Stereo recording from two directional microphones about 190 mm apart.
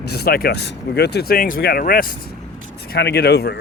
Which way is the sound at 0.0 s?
60° left (ahead or behind).